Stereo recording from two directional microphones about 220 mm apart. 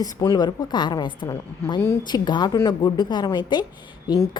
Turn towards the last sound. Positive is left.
turn(degrees=15)  # may be behind; listen again after turning